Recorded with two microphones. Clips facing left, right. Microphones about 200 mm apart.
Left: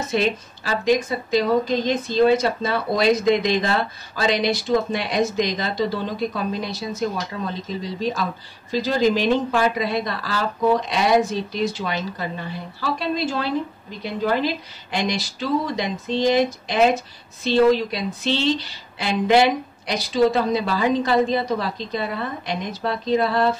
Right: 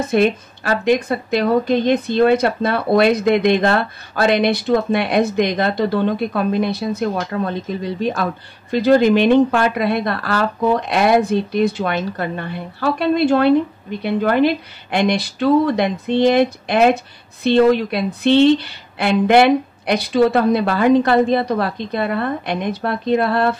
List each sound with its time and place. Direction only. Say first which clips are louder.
0.0 s speech: right 6 dB; 55° right (ahead or behind)